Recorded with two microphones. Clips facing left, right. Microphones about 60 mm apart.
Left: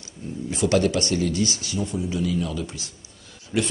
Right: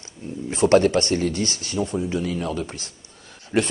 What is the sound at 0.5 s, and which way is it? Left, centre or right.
Speech, right.